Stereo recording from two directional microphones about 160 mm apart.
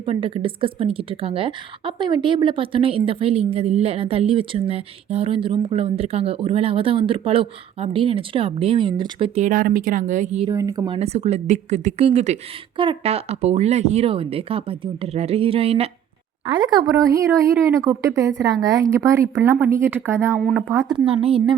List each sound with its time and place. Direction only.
0.0 s a woman's voice: 35° right (ahead or behind)
9.4 s speech: 55° right (ahead or behind)
10.5 s a woman's voice: 20° right (ahead or behind)
10.9 s a woman's voice: 40° right (ahead or behind)
16.6 s a woman's voice: 25° right (ahead or behind)
20.3 s speech: centre (ahead or behind)
20.6 s speech: 15° right (ahead or behind)
20.8 s a woman's voice: 30° right (ahead or behind)